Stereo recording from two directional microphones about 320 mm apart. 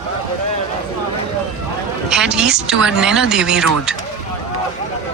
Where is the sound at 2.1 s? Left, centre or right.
Centre.